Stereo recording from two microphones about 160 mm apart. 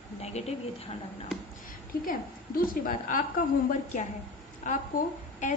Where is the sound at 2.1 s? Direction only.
60° left (ahead or behind).